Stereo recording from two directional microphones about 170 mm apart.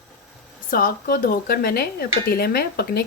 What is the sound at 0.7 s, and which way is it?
Speech, 55° left (ahead or behind).